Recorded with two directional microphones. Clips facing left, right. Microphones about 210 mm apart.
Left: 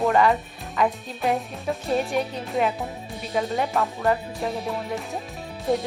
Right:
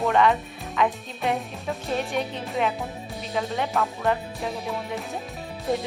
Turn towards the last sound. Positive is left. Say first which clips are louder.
# left 2 dB
turn(degrees=0)  # may be behind; listen again after turning